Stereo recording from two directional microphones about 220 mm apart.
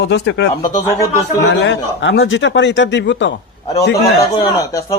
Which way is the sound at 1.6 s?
55° left (ahead or behind).